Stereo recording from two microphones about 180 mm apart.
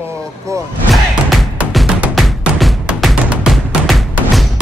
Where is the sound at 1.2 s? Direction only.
Centre (ahead or behind).